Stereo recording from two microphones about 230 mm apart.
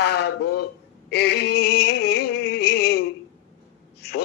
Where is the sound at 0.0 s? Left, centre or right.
Left.